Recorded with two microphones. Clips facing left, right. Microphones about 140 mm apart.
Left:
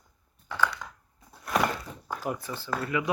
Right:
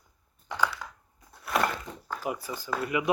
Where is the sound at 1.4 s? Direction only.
Centre (ahead or behind).